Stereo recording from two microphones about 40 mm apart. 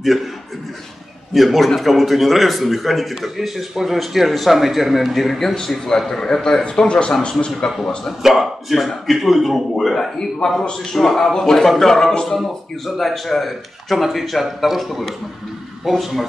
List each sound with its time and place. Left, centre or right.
1.3 s a man's voice: centre
8.2 s speech: centre
9.9 s a man's voice: centre